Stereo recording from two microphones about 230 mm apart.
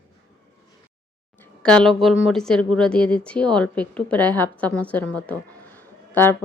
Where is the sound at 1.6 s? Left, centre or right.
Centre.